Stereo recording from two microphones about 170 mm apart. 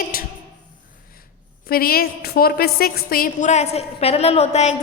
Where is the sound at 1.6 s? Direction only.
60° left (ahead or behind).